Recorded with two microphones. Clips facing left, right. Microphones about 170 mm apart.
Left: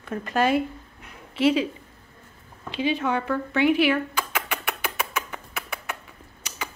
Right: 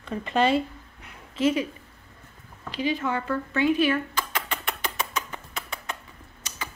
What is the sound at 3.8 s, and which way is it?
Rodents, 10° left (ahead or behind).